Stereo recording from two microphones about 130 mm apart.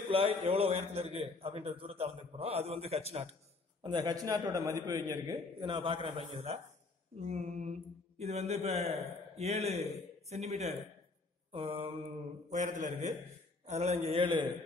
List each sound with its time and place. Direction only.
0.1 s a man's voice: 45° right (ahead or behind)
3.8 s a man's voice: 35° right (ahead or behind)
7.2 s a man's voice: 60° right (ahead or behind)
11.5 s a man's voice: 45° right (ahead or behind)
12.1 s a man's voice: 65° right (ahead or behind)
13.7 s a man's voice: 60° right (ahead or behind)